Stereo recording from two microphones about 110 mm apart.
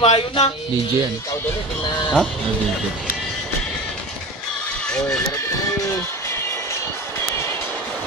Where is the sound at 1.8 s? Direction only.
45° left (ahead or behind).